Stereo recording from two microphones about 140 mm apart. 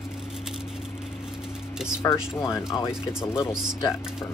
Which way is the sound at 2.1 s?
5° right (ahead or behind).